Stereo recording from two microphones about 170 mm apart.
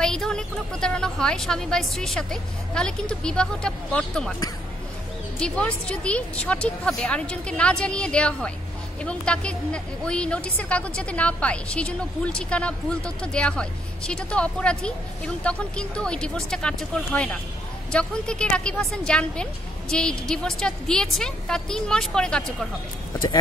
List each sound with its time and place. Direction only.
0.0 s a woman's voice: 5° left (ahead or behind)
5.4 s a woman's voice: 5° left (ahead or behind)
23.1 s speech: 25° left (ahead or behind)